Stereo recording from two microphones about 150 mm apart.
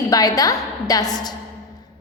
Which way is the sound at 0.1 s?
25° left (ahead or behind).